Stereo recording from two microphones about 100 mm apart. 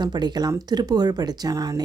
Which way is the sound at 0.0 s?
45° right (ahead or behind).